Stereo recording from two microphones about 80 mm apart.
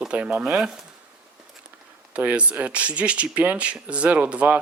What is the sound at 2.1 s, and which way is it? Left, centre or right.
Speech, centre.